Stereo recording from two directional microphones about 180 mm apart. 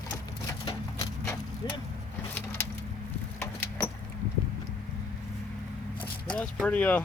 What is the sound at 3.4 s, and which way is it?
Vehicle, 10° left (ahead or behind).